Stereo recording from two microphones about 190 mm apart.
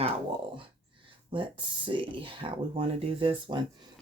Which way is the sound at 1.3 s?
25° right (ahead or behind).